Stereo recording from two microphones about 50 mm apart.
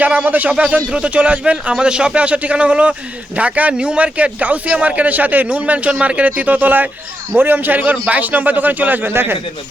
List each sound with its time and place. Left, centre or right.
0.3 s a man's voice: right